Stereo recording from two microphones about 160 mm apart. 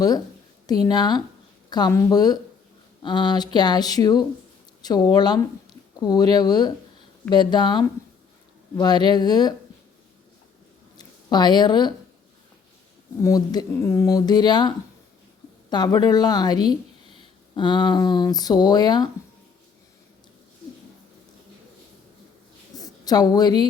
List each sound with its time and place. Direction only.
0.7 s speech: 25° left (ahead or behind)
10.9 s speech: 25° left (ahead or behind)
13.2 s speech: 25° left (ahead or behind)
15.7 s speech: 25° left (ahead or behind)
22.8 s a woman's voice: 25° left (ahead or behind)